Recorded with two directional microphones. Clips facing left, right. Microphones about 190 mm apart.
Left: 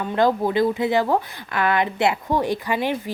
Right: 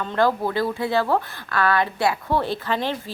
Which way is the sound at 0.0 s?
15° left (ahead or behind).